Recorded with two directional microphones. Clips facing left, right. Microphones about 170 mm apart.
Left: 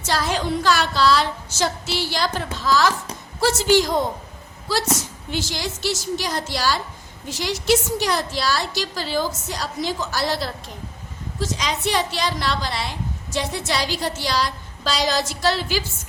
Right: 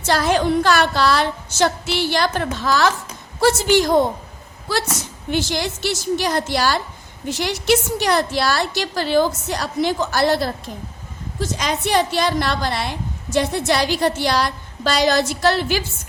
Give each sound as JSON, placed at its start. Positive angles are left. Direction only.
{"t": 0.0, "sound": "a woman's voice", "side_deg": -55}
{"t": 5.3, "sound": "a woman's voice", "side_deg": -60}